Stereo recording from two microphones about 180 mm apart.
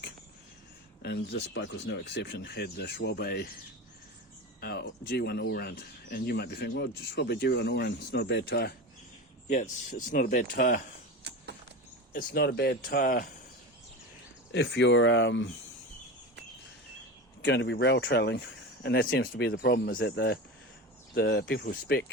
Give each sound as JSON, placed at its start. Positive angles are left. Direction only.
{"t": 1.0, "sound": "speech", "side_deg": 70}
{"t": 4.6, "sound": "speech", "side_deg": 60}
{"t": 9.5, "sound": "speech", "side_deg": 50}
{"t": 11.2, "sound": "a sound", "side_deg": -70}
{"t": 12.1, "sound": "speech", "side_deg": 60}
{"t": 14.5, "sound": "speech", "side_deg": 80}
{"t": 17.4, "sound": "speech", "side_deg": 75}
{"t": 19.5, "sound": "speech", "side_deg": 60}